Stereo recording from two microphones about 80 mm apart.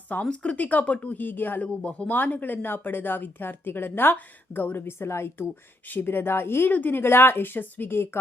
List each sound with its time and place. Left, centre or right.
0.1 s speech: centre